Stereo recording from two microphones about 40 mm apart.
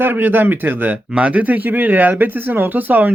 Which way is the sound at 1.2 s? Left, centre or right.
Right.